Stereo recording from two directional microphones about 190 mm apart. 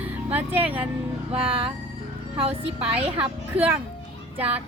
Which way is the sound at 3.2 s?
10° right (ahead or behind).